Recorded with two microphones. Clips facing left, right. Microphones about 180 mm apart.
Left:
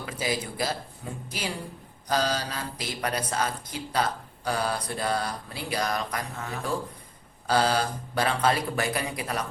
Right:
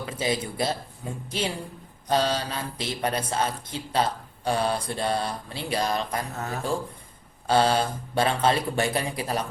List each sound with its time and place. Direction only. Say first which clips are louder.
0.0 s speech: right 3 dB; 25° right (ahead or behind)
6.3 s a man's voice: right 3 dB; 40° right (ahead or behind)
7.4 s speech: right 3 dB; 25° right (ahead or behind)